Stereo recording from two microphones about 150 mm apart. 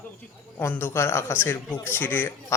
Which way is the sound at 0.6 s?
15° left (ahead or behind).